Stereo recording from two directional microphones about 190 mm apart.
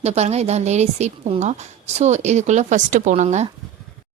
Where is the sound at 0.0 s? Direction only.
35° right (ahead or behind).